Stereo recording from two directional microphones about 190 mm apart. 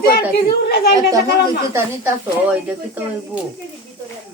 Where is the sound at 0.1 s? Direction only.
55° left (ahead or behind).